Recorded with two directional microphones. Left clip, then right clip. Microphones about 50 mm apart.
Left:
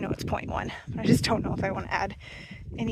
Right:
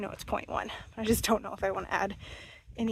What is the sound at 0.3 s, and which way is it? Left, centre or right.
Speech, right.